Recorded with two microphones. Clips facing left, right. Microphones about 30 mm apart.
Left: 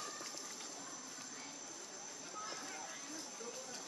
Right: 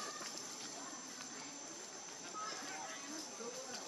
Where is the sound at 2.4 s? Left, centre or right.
Centre.